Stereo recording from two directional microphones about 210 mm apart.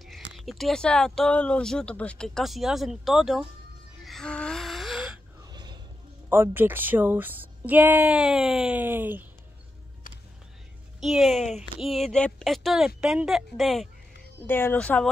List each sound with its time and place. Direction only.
0.0 s speech: centre (ahead or behind)
4.0 s gasp: centre (ahead or behind)
5.4 s a sound: 20° right (ahead or behind)
6.2 s speech: 10° right (ahead or behind)
11.0 s speech: centre (ahead or behind)